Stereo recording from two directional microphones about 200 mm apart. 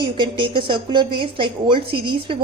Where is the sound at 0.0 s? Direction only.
25° right (ahead or behind).